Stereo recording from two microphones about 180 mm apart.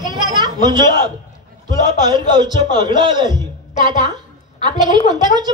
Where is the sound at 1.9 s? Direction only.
25° right (ahead or behind).